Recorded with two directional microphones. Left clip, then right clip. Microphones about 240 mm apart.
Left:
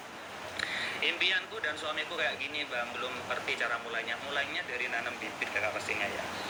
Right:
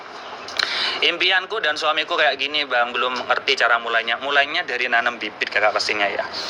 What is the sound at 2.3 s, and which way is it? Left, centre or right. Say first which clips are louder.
Speech: right 14 dB; centre.